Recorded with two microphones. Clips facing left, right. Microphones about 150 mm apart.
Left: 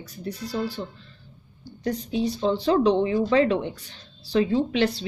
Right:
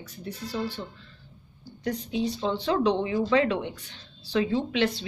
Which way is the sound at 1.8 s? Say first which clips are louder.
Left 3 dB; 35° left (ahead or behind).